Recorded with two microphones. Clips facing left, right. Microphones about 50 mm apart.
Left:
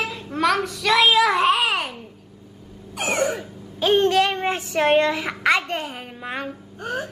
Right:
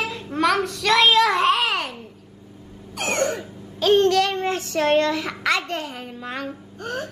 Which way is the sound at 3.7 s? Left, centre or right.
Centre.